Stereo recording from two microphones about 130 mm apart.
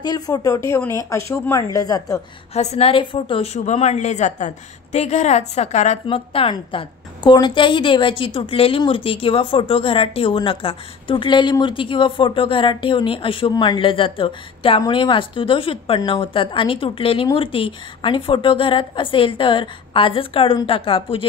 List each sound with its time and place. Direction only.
0.0 s speech: 30° left (ahead or behind)
2.5 s speech: 55° left (ahead or behind)
3.0 s speech: 40° left (ahead or behind)
3.5 s a woman's voice: 60° left (ahead or behind)
6.0 s a woman's voice: 45° left (ahead or behind)